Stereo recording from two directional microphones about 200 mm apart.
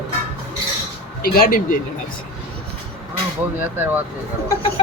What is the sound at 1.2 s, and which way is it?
Speech, 45° left (ahead or behind).